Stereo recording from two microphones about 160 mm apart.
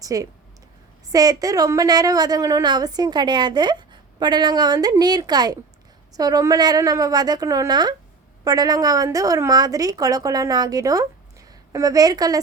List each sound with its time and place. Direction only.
0.0 s a woman's voice: 20° right (ahead or behind)